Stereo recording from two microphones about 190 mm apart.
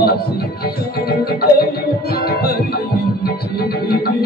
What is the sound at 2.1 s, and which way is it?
Music, 55° left (ahead or behind).